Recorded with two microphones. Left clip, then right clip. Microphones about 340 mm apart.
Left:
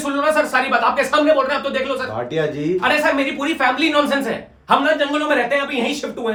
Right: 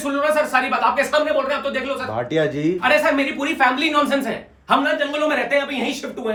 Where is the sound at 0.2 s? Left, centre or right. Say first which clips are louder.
Left 1 dB; centre.